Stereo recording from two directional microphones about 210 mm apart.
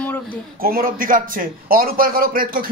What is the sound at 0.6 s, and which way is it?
A man's voice, 45° right (ahead or behind).